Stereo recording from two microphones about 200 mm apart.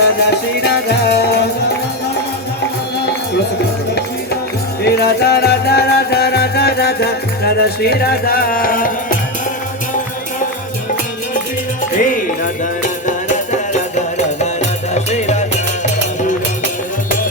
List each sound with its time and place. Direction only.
0.0 s music: 55° left (ahead or behind)
4.9 s music: 55° left (ahead or behind)
11.9 s music: 40° left (ahead or behind)